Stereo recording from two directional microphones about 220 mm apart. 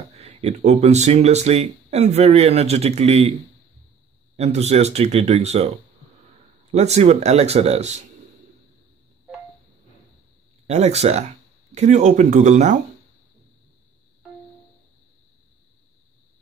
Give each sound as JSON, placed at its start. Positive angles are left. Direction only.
{"t": 0.1, "sound": "speech", "side_deg": -30}
{"t": 4.4, "sound": "speech", "side_deg": -30}
{"t": 6.7, "sound": "speech", "side_deg": -30}
{"t": 10.7, "sound": "speech", "side_deg": -30}